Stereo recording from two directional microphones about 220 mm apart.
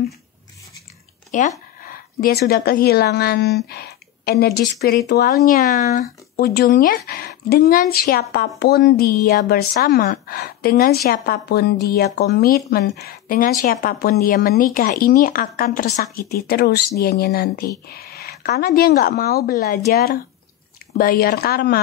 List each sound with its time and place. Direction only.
1.3 s speech: 35° left (ahead or behind)